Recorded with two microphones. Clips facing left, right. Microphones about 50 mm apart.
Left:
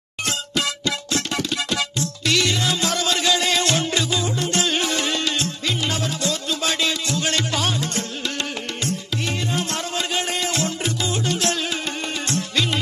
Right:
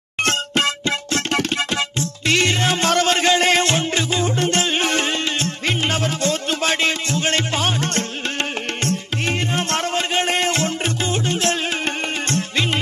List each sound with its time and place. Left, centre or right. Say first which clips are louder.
0.2 s music: right 5 dB; right
1.7 s music: right 2 dB; right
8.8 s music: right 3 dB; right